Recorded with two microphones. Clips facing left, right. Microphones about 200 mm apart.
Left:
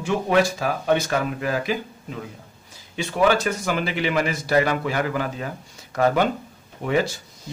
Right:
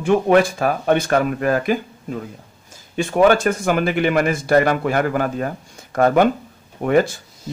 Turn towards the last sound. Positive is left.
turn(degrees=-50)  # may be behind; listen again after turning